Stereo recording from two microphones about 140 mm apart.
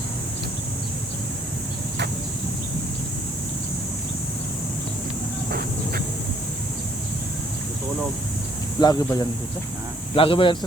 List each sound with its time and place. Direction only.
5.5 s vehicle: 90° right
8.8 s speech: 25° left (ahead or behind)
10.2 s speech: 40° left (ahead or behind)